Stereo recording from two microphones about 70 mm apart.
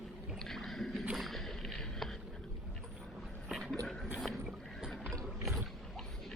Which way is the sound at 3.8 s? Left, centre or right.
Centre.